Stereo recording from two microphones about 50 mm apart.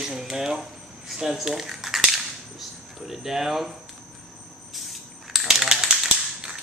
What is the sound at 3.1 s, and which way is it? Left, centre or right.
Speech, centre.